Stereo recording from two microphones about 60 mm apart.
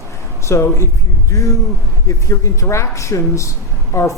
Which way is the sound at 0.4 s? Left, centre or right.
Left.